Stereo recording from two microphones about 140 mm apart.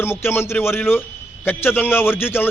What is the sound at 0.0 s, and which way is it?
A man's voice, 15° left (ahead or behind).